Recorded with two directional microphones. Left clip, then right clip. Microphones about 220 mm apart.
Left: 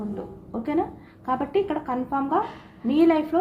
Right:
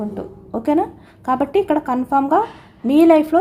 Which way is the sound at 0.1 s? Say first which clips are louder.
Right 7 dB; 50° right (ahead or behind).